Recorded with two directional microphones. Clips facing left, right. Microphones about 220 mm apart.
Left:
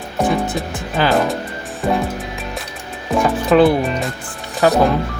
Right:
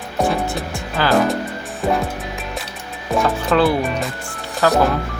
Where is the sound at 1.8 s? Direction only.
Centre (ahead or behind).